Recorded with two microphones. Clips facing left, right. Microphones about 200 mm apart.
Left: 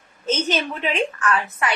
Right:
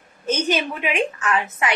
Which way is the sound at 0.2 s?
10° right (ahead or behind).